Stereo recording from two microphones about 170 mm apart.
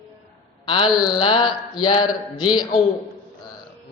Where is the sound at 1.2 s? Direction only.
30° left (ahead or behind).